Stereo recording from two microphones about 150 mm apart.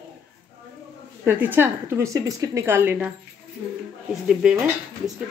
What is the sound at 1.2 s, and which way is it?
A woman's voice, 10° right (ahead or behind).